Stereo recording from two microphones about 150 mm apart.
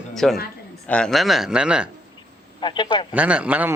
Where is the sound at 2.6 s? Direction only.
30° left (ahead or behind).